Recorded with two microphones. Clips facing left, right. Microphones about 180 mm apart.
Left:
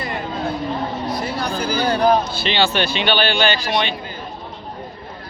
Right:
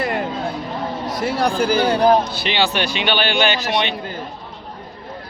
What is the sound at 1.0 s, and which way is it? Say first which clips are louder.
Speech: right 3 dB; 90° right.